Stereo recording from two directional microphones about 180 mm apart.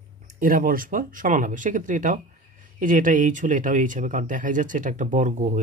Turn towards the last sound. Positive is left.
turn(degrees=-40)  # may be behind; listen again after turning